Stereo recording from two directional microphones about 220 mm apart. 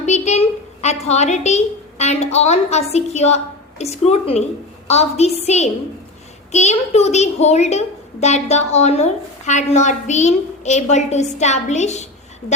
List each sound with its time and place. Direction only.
0.0 s a woman's voice: 30° left (ahead or behind)